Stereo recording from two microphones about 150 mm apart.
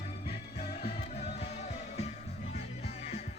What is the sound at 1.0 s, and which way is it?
Music, 45° left (ahead or behind).